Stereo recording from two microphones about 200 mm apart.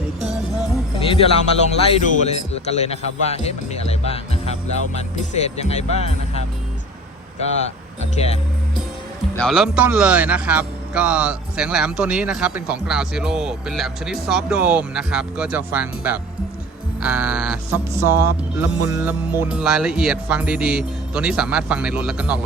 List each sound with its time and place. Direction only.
0.9 s music: 30° left (ahead or behind)
1.9 s a man's voice: 35° left (ahead or behind)
9.3 s speech: centre (ahead or behind)